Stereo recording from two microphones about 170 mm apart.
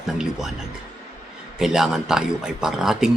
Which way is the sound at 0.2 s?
5° right (ahead or behind).